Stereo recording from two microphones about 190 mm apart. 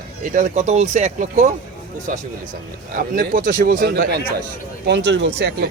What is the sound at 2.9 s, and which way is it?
A man's voice, 50° right (ahead or behind).